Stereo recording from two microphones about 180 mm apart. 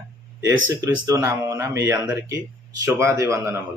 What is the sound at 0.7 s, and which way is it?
A man's voice, 15° right (ahead or behind).